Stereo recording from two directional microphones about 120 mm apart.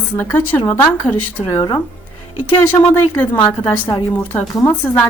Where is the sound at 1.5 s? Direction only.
35° left (ahead or behind).